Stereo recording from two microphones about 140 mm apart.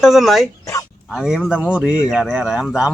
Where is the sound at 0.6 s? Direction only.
25° left (ahead or behind).